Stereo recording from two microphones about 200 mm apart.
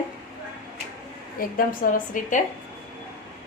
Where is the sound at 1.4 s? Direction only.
45° left (ahead or behind).